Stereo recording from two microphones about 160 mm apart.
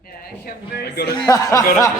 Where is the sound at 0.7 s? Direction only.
90° left.